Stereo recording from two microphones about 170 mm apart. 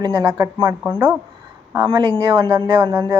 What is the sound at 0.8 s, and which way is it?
Speech, 10° right (ahead or behind).